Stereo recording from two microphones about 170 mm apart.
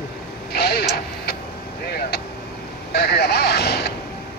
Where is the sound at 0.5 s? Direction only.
70° left (ahead or behind).